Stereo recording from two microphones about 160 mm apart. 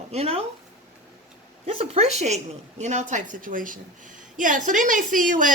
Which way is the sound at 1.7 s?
40° right (ahead or behind).